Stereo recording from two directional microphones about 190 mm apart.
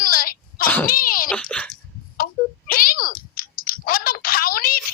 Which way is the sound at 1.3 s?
5° left (ahead or behind).